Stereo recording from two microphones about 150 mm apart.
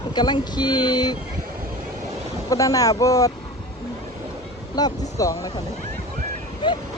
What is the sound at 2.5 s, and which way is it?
Speech, 25° left (ahead or behind).